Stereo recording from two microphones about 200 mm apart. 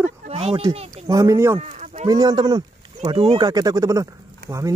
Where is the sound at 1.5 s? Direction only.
35° right (ahead or behind).